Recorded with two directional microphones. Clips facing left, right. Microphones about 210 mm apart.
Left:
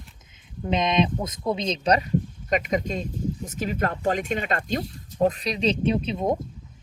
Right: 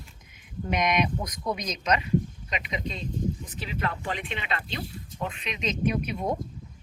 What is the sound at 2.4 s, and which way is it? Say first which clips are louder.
Speech: left 9 dB; 45° left (ahead or behind).